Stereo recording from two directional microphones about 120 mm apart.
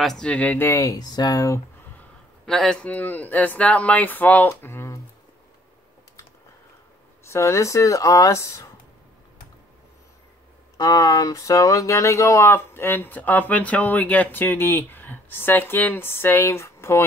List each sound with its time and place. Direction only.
0.0 s speech: 5° left (ahead or behind)
0.7 s speech: 30° left (ahead or behind)
2.0 s a man's voice: 5° left (ahead or behind); by 5.0 s 20° left (ahead or behind)
7.2 s speech: 25° left (ahead or behind)
10.8 s speech: 30° left (ahead or behind)